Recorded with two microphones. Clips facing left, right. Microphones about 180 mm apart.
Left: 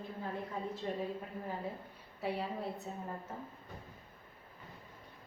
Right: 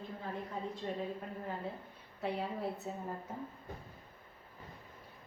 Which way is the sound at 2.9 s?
5° right (ahead or behind).